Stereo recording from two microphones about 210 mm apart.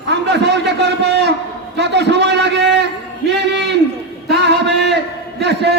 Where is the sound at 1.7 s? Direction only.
55° right (ahead or behind).